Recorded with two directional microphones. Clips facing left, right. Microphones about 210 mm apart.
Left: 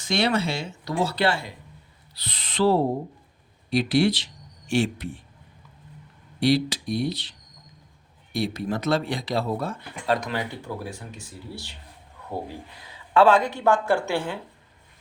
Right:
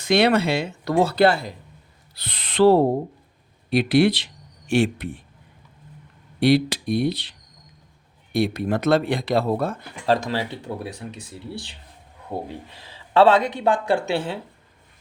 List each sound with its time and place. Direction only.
0.0 s speech: 60° right (ahead or behind); by 1.5 s 40° right (ahead or behind)
2.1 s speech: 60° right (ahead or behind)
6.4 s speech: 60° right (ahead or behind)
10.1 s speech: 25° right (ahead or behind)